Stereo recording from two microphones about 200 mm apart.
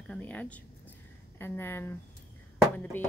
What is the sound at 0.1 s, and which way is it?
Speech, 10° left (ahead or behind).